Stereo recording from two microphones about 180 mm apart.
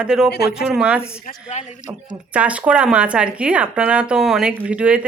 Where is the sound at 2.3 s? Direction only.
5° right (ahead or behind).